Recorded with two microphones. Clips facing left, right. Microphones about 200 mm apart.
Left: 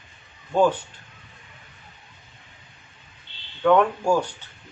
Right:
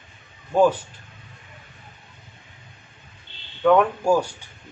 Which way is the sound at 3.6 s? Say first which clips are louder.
Right 1 dB; 5° right (ahead or behind).